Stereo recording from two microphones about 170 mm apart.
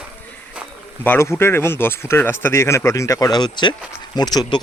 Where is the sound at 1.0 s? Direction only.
15° left (ahead or behind).